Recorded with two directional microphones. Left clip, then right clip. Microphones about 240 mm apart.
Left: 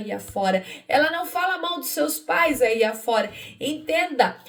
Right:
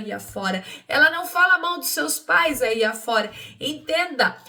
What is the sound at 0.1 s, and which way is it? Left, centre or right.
A woman's voice, centre.